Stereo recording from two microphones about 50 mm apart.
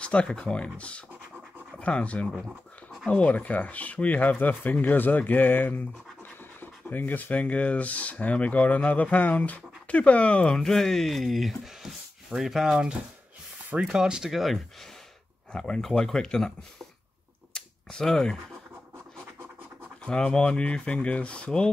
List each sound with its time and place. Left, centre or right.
0.0 s speech: left
2.3 s a sound: centre
3.1 s speech: left; by 12.9 s centre
13.9 s speech: centre
14.3 s speech: centre
15.5 s speech: centre
17.6 s a sound: centre
20.1 s speech: centre